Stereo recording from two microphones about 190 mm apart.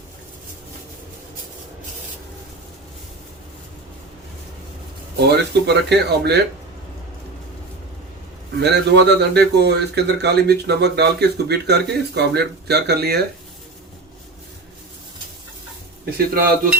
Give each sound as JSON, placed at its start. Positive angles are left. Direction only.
{"t": 5.3, "sound": "speech", "side_deg": -60}
{"t": 8.5, "sound": "speech", "side_deg": -65}
{"t": 16.0, "sound": "speech", "side_deg": -55}